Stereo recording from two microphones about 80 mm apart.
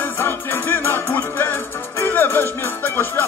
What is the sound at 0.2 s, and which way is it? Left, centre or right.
Music, left.